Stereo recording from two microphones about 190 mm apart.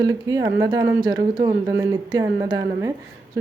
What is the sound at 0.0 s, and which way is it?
Speech, 20° right (ahead or behind).